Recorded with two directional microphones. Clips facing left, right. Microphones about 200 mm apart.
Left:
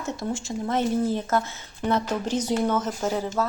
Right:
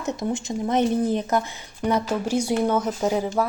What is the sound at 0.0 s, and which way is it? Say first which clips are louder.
Speech: right 3 dB; 20° right (ahead or behind).